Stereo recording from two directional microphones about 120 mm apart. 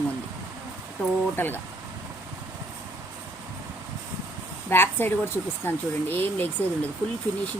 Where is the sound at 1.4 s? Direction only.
15° left (ahead or behind).